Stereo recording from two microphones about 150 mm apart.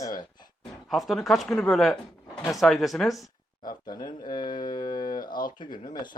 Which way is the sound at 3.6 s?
30° left (ahead or behind).